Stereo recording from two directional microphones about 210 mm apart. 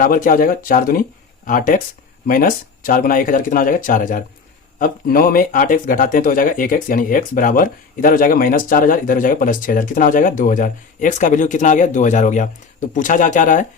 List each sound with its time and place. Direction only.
0.0 s speech: 40° left (ahead or behind)